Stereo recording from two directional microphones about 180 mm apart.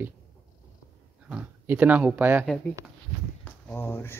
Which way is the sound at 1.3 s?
10° right (ahead or behind).